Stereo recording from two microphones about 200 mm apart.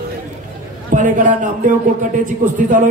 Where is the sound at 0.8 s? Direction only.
40° right (ahead or behind).